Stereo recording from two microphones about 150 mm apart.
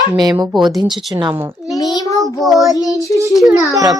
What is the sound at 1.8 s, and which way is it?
Speech, 25° left (ahead or behind).